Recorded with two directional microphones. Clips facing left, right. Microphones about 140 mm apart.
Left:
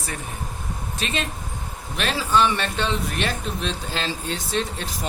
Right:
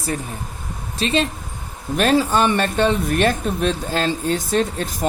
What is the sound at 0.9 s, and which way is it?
Speech, 30° right (ahead or behind).